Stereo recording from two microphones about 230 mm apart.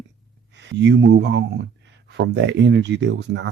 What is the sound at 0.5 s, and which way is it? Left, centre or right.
Speech, right.